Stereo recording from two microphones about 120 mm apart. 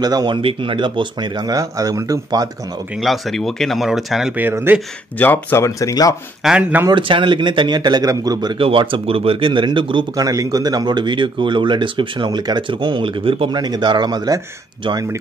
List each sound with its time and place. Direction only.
0.0 s speech: 35° right (ahead or behind)
0.4 s speech: 50° right (ahead or behind); by 2.5 s 30° right (ahead or behind)
3.0 s speech: centre (ahead or behind)
4.4 s speech: 15° right (ahead or behind)
5.2 s speech: 15° left (ahead or behind)
6.4 s speech: 10° right (ahead or behind)
6.9 s speech: 45° right (ahead or behind)
8.5 s speech: 45° right (ahead or behind)
10.2 s speech: 30° right (ahead or behind)